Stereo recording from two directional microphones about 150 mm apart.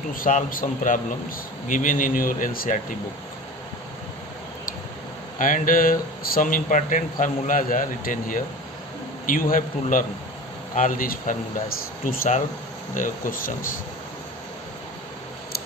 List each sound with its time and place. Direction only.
0.1 s a man's voice: 65° left (ahead or behind)
5.4 s a man's voice: 65° left (ahead or behind)